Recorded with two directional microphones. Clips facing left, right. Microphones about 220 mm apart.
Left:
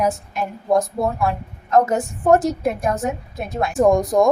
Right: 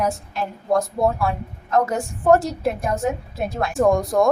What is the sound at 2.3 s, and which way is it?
A woman's voice, 20° left (ahead or behind).